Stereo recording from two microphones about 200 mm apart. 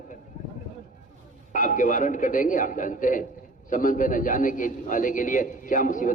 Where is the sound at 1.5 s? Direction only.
40° left (ahead or behind).